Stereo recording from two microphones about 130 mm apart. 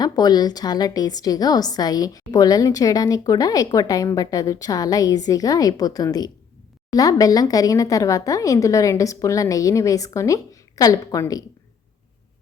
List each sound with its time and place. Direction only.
0.0 s a woman's voice: 30° left (ahead or behind)